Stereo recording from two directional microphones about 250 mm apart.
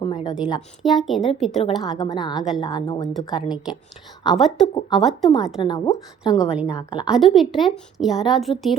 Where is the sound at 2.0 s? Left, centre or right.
Centre.